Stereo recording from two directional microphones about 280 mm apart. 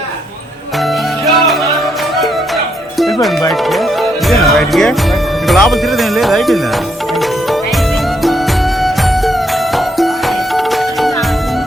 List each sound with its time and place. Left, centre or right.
3.0 s music: centre
5.5 s speech: centre